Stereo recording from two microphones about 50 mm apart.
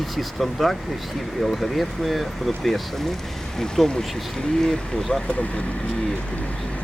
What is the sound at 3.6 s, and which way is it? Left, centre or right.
Speech, centre.